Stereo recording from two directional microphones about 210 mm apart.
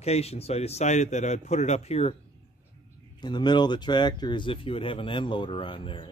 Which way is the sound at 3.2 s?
20° left (ahead or behind).